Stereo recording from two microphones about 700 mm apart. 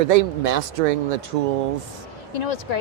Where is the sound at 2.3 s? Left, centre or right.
Left.